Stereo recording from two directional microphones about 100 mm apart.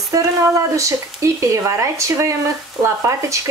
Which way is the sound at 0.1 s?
30° right (ahead or behind).